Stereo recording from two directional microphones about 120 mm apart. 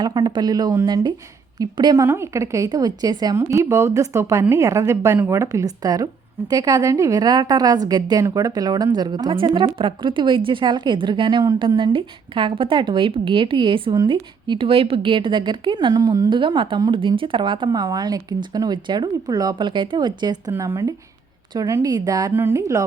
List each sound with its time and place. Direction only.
0.0 s a woman's voice: 35° right (ahead or behind)
2.0 s a woman's voice: 20° right (ahead or behind)
16.3 s a woman's voice: 45° right (ahead or behind)
20.5 s a woman's voice: 25° right (ahead or behind)